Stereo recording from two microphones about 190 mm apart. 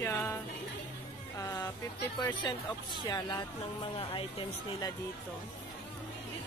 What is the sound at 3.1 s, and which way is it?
Speech, 20° left (ahead or behind).